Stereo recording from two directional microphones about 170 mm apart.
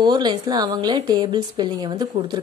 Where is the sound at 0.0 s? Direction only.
25° right (ahead or behind).